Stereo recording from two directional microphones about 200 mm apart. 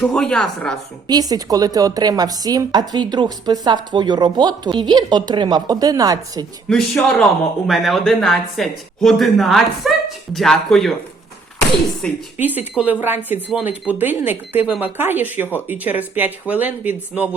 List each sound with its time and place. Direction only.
0.0 s speech: 5° left (ahead or behind)
1.0 s speech: 20° right (ahead or behind)
6.7 s speech: centre (ahead or behind)
12.0 s speech: 5° left (ahead or behind)
12.4 s speech: 10° right (ahead or behind)